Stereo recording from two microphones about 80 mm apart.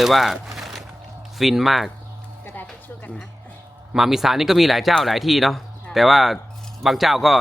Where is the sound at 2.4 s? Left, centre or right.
Left.